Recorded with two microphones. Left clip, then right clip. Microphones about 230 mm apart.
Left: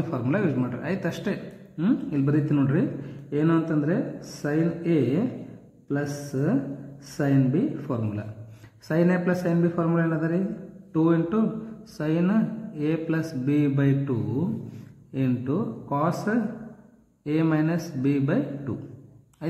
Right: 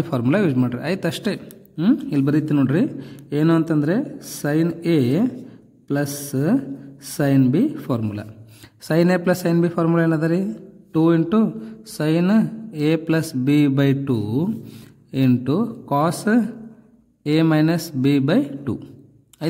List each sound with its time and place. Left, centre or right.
0.1 s a man's voice: right